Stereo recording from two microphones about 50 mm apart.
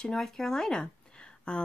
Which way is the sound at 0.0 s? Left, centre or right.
Centre.